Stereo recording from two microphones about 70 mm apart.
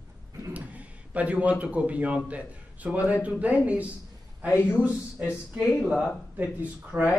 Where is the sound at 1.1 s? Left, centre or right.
Centre.